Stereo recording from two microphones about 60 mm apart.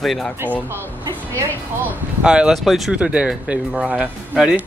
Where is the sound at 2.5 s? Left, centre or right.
Centre.